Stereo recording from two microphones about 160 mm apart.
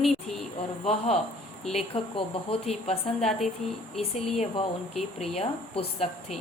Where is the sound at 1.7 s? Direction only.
35° left (ahead or behind).